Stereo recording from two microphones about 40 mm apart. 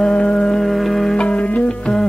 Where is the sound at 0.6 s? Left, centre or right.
Centre.